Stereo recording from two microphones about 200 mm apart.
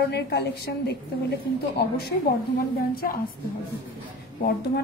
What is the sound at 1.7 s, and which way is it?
Speech, 55° left (ahead or behind).